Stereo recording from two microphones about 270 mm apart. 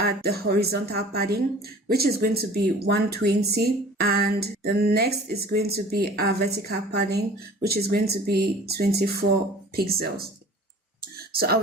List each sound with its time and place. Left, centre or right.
0.0 s speech: right
11.3 s speech: right